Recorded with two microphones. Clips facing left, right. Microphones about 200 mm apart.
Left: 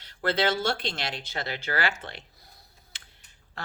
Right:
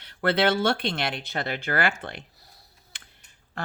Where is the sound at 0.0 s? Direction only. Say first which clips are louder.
Right 3 dB; 60° right (ahead or behind).